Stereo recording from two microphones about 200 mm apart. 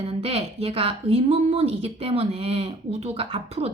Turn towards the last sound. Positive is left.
turn(degrees=-30)  # may be behind; listen again after turning